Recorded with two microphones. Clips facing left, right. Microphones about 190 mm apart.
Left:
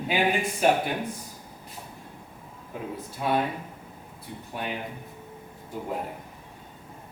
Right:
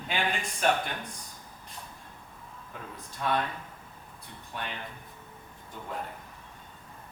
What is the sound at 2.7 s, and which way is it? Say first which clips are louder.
A man's voice: left 9 dB; 10° left (ahead or behind).